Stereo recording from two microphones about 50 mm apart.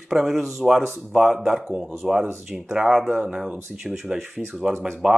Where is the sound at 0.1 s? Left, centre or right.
Centre.